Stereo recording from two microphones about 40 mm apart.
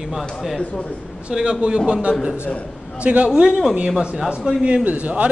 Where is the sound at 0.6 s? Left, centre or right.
Left.